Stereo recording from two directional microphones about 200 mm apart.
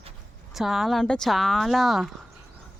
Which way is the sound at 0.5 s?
Centre (ahead or behind).